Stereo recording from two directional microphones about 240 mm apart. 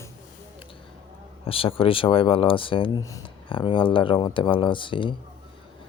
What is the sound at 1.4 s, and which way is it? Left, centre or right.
Speech, left.